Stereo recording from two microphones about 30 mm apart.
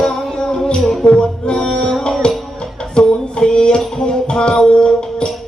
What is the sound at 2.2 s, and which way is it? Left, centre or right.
Music, left.